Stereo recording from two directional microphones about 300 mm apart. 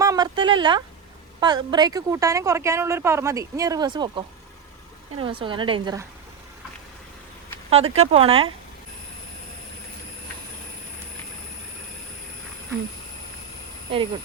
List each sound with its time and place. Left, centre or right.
0.0 s a sound: centre
1.4 s a woman's voice: centre
7.7 s speech: centre